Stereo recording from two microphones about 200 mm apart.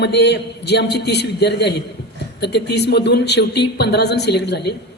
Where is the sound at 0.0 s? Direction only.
55° left (ahead or behind).